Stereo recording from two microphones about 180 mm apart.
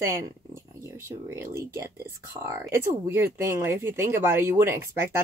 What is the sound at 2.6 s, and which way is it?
Speech, 15° right (ahead or behind).